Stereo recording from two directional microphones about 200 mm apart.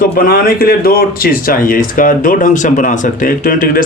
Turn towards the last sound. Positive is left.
turn(degrees=45)  # may be behind; listen again after turning